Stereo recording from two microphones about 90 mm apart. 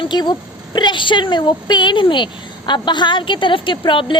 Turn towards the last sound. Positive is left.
turn(degrees=65)  # may be behind; listen again after turning